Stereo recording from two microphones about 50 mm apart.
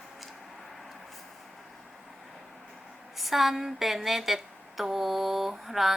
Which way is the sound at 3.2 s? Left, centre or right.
Centre.